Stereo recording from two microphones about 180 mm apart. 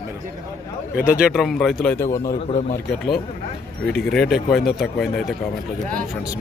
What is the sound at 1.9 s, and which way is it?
Speech, 15° left (ahead or behind).